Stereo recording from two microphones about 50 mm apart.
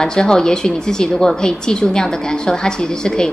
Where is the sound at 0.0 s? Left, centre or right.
Centre.